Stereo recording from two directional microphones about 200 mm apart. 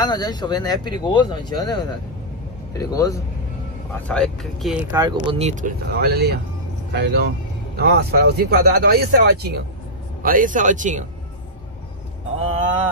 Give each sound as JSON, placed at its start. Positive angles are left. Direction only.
{"t": 0.0, "sound": "speech", "side_deg": 20}
{"t": 4.1, "sound": "speech", "side_deg": 0}
{"t": 4.9, "sound": "speech", "side_deg": -20}
{"t": 5.9, "sound": "speech", "side_deg": -55}